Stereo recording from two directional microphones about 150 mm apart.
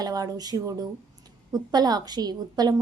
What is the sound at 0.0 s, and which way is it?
A woman's voice, 25° right (ahead or behind).